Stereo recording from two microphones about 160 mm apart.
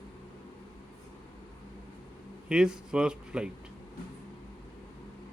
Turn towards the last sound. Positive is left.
turn(degrees=-5)  # may be behind; listen again after turning